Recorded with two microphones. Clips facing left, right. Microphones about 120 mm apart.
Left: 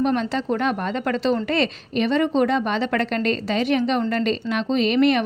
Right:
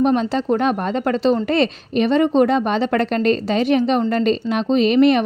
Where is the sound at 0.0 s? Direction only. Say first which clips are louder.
Right 4 dB; 40° right (ahead or behind).